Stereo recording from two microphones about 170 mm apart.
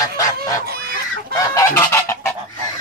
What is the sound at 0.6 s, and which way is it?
Chicken, 65° right (ahead or behind).